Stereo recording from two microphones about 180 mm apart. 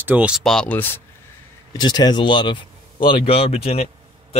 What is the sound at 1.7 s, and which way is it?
A man's voice, 25° left (ahead or behind).